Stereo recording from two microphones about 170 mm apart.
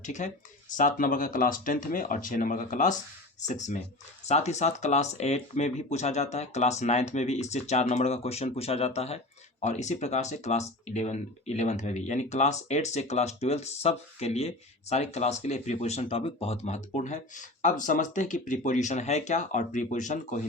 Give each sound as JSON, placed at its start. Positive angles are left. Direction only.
{"t": 0.0, "sound": "speech", "side_deg": 45}